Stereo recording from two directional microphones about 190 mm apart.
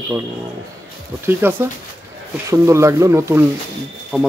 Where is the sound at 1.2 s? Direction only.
10° right (ahead or behind).